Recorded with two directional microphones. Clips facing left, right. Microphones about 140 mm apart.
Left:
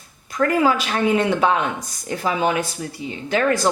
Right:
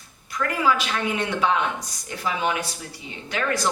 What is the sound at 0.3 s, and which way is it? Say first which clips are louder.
Speech: left 5 dB; 40° left (ahead or behind).